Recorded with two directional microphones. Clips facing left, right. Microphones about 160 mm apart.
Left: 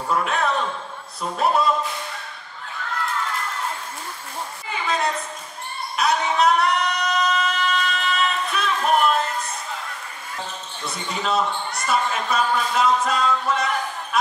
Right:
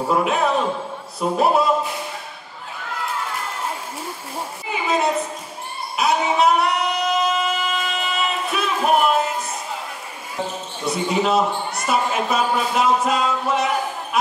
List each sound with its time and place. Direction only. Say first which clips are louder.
0.1 s a sound: right 3 dB; 10° right (ahead or behind)
1.2 s speech: right 3 dB; 10° right (ahead or behind)
4.6 s a sound: right 4 dB; 5° right (ahead or behind)
5.9 s singing: right 2 dB; 5° right (ahead or behind)
8.7 s music: right 2 dB; 10° right (ahead or behind)
11.1 s speech: right 6 dB; 5° right (ahead or behind)
11.3 s speech: right 3 dB; 25° right (ahead or behind)
12.1 s speech: right 2 dB; 10° right (ahead or behind)
13.5 s a sound: right 3 dB; 10° right (ahead or behind)